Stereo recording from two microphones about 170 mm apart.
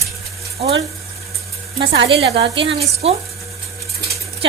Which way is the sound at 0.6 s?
35° right (ahead or behind).